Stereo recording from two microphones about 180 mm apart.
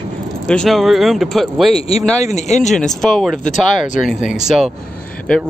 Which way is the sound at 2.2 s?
40° left (ahead or behind).